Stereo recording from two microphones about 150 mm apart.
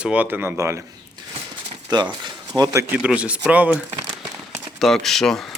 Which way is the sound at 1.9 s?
30° right (ahead or behind).